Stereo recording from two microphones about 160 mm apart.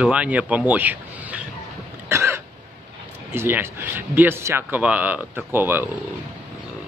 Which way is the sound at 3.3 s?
15° right (ahead or behind).